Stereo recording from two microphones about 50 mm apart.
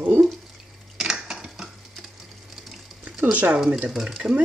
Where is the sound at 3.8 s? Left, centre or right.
Centre.